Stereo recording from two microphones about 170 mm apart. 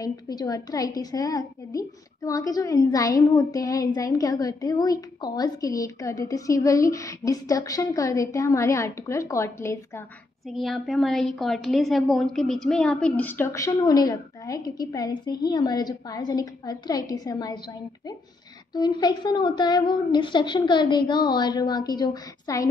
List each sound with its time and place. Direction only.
0.0 s a woman's voice: 20° left (ahead or behind)
10.5 s a woman's voice: centre (ahead or behind); by 17.6 s 20° left (ahead or behind)
18.7 s a woman's voice: 25° left (ahead or behind)